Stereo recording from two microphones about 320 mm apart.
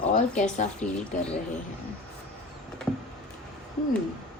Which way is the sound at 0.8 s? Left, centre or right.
Left.